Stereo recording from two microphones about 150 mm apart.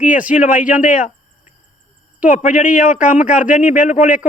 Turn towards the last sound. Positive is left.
turn(degrees=60)  # may be behind; listen again after turning